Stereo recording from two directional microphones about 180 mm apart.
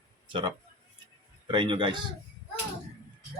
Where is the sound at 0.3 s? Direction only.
30° right (ahead or behind).